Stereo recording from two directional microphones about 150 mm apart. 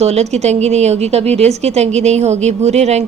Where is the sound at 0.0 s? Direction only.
45° right (ahead or behind).